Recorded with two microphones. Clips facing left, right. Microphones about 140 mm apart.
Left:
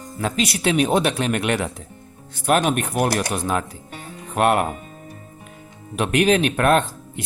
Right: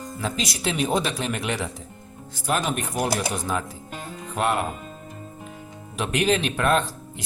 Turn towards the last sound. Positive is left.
turn(degrees=60)  # may be behind; listen again after turning